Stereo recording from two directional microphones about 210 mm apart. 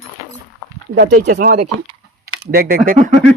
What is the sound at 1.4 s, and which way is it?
Speech, 40° right (ahead or behind).